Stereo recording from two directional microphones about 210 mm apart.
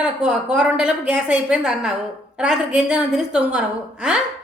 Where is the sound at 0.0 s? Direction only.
5° right (ahead or behind).